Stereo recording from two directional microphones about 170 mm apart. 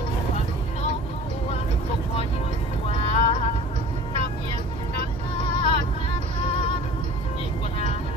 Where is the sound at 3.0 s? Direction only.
30° left (ahead or behind).